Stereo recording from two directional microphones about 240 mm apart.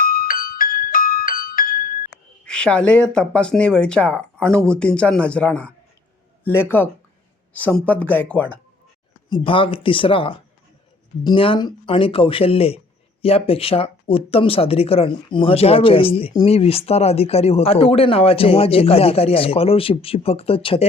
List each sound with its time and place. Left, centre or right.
0.0 s music: left
2.4 s speech: centre
9.3 s speech: left